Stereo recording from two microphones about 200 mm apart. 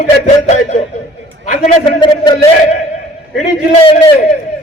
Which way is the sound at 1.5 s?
25° left (ahead or behind).